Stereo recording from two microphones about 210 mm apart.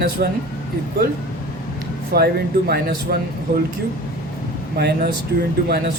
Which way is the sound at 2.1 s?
50° right (ahead or behind).